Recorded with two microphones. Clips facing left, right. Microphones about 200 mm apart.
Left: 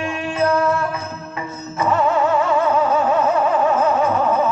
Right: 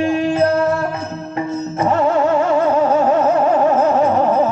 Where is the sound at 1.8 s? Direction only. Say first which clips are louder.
Right 2 dB; 50° right (ahead or behind).